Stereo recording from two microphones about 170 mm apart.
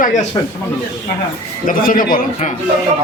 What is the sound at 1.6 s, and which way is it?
Speech, 55° left (ahead or behind).